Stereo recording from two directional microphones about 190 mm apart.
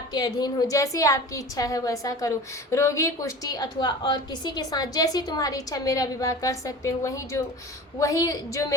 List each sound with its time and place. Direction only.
0.1 s a woman's voice: 20° left (ahead or behind)